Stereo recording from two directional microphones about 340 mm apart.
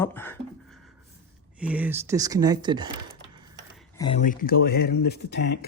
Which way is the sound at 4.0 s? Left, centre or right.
Centre.